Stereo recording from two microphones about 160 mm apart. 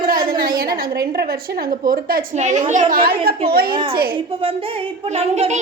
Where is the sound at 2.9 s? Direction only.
65° right (ahead or behind).